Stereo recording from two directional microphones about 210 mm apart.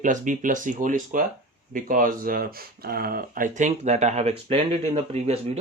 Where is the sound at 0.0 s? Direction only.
40° right (ahead or behind).